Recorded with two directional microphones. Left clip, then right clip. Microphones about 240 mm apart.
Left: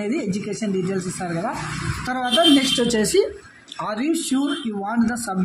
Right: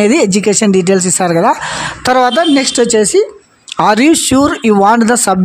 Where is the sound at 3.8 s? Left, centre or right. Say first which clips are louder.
Right 15 dB; right.